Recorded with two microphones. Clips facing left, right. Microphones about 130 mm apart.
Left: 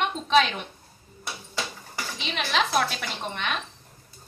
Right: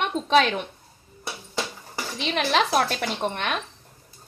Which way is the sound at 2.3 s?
50° right (ahead or behind).